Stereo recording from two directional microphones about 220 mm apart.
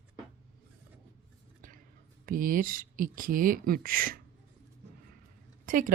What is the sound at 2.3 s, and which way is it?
Speech, 40° right (ahead or behind).